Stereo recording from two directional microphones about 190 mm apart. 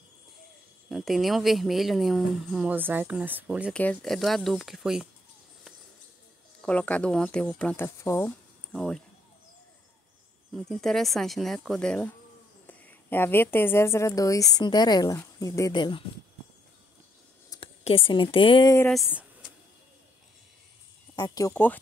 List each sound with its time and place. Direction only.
0.8 s speech: centre (ahead or behind)
3.7 s speech: 5° left (ahead or behind)
6.6 s a woman's voice: 5° left (ahead or behind)
8.7 s speech: 5° left (ahead or behind)
10.5 s a woman's voice: centre (ahead or behind); by 16.0 s 25° left (ahead or behind)
17.5 s speech: 30° left (ahead or behind)
18.9 s speech: 5° left (ahead or behind)
21.2 s a woman's voice: 15° left (ahead or behind)